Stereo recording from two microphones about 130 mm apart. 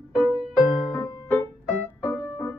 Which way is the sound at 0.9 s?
30° left (ahead or behind).